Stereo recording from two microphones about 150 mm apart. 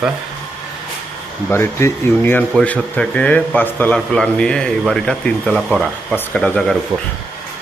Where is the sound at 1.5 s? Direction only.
15° left (ahead or behind).